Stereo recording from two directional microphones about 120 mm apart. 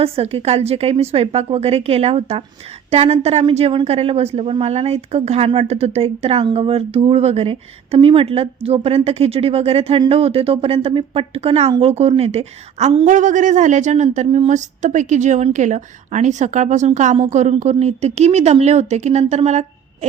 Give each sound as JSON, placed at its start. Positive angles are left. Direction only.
{"t": 0.0, "sound": "speech", "side_deg": -55}
{"t": 13.1, "sound": "speech", "side_deg": -90}
{"t": 15.5, "sound": "speech", "side_deg": -90}
{"t": 17.6, "sound": "speech", "side_deg": -65}